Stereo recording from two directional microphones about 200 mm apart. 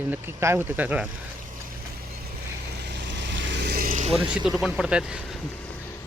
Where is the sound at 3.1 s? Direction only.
60° right (ahead or behind); by 4.1 s 40° right (ahead or behind).